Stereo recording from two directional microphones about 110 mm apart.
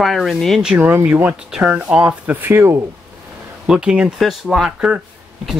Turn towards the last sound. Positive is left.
turn(degrees=-5)  # may be behind; listen again after turning